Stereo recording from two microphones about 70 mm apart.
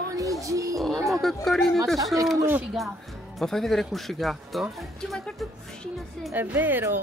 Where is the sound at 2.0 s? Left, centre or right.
Right.